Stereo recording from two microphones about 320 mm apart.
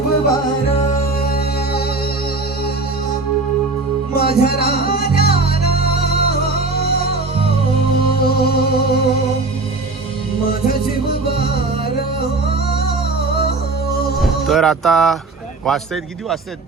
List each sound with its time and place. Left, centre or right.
1.2 s music: left
4.1 s music: left
7.9 s music: left
10.4 s music: left
13.9 s music: left
14.2 s speech: centre